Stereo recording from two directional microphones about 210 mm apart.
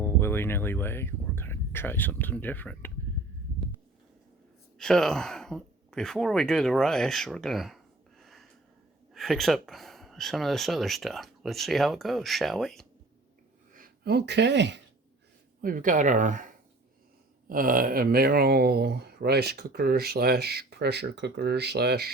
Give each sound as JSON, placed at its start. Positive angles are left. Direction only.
{"t": 0.0, "sound": "speech", "side_deg": 10}
{"t": 4.8, "sound": "speech", "side_deg": 5}
{"t": 8.2, "sound": "a sound", "side_deg": 0}
{"t": 9.1, "sound": "speech", "side_deg": 0}
{"t": 13.7, "sound": "speech", "side_deg": -45}
{"t": 15.6, "sound": "speech", "side_deg": -40}
{"t": 17.5, "sound": "speech", "side_deg": -40}